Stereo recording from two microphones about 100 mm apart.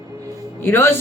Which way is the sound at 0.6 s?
25° left (ahead or behind).